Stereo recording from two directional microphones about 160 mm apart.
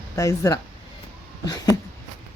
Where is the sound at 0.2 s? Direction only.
20° left (ahead or behind).